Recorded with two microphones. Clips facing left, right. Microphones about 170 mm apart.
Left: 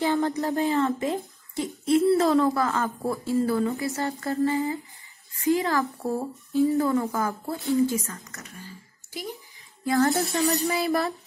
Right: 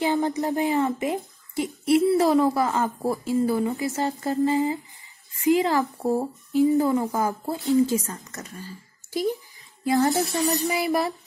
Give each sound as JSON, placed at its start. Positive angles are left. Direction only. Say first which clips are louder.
{"t": 0.0, "sound": "a sound", "louder": "right 1 dB", "side_deg": -15}
{"t": 0.4, "sound": "speech", "louder": "right 1 dB", "side_deg": -15}
{"t": 8.1, "sound": "speech", "louder": "right 4 dB", "side_deg": -30}
{"t": 9.8, "sound": "speech", "louder": "right 1 dB", "side_deg": -20}